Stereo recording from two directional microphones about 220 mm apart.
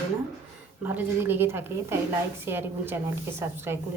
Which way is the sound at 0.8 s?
10° right (ahead or behind).